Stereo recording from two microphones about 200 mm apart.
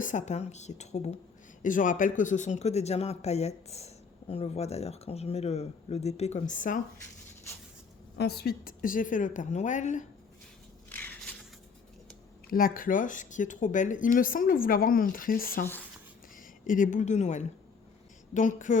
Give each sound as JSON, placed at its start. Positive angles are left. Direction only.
{"t": 0.0, "sound": "speech", "side_deg": 40}
{"t": 8.2, "sound": "speech", "side_deg": 55}
{"t": 10.8, "sound": "shuffle", "side_deg": 10}
{"t": 12.5, "sound": "speech", "side_deg": 45}